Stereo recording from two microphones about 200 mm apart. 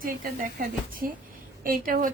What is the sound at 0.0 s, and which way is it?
A woman's voice, 45° right (ahead or behind).